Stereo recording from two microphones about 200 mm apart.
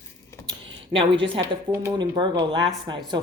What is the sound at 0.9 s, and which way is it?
Speech, 25° right (ahead or behind).